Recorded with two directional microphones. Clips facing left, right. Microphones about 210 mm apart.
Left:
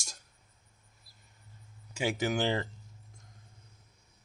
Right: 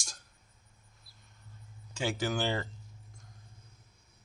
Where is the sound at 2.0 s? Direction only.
20° left (ahead or behind).